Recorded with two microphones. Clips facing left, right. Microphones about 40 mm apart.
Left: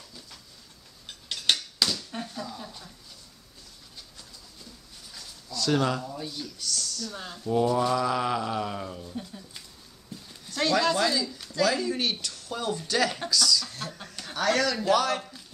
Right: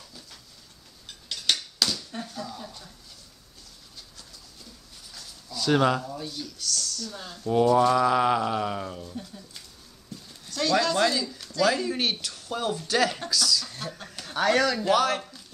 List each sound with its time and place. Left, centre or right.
1.0 s cutlery: left
1.8 s a sound: centre
5.5 s speech: centre
6.1 s speech: centre
7.7 s speech: right
9.1 s a sound: centre
10.7 s speech: centre
11.0 s speech: centre
11.2 s a sound: centre
11.6 s speech: centre
13.3 s chicken: centre
14.3 s speech: centre